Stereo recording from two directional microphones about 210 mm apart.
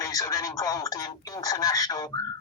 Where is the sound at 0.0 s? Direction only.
15° left (ahead or behind).